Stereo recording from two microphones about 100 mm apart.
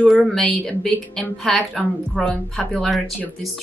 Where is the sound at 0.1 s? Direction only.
5° left (ahead or behind).